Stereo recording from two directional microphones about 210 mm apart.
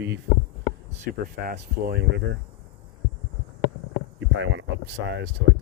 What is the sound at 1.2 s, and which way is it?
Speech, 45° right (ahead or behind).